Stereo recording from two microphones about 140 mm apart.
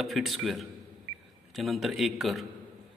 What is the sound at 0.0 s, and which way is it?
A man's voice, centre (ahead or behind).